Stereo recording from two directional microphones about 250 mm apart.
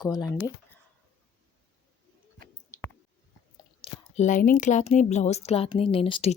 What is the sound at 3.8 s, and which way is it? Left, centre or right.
A woman's voice, left.